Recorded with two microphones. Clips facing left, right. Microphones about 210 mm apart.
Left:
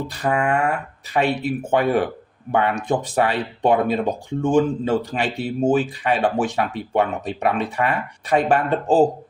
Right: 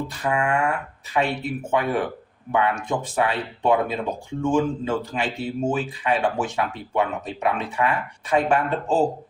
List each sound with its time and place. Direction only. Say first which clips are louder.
0.1 s a man's voice: left 4 dB; 35° left (ahead or behind)